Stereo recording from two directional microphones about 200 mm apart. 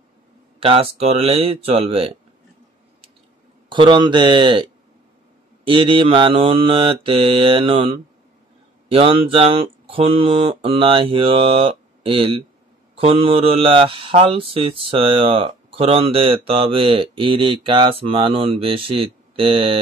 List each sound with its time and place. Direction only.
0.6 s speech: 30° right (ahead or behind)
3.6 s speech: 25° right (ahead or behind)
5.7 s speech: 25° right (ahead or behind)